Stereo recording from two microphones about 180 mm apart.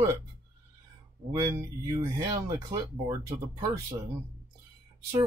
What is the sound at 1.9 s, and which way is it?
Speech, 20° right (ahead or behind).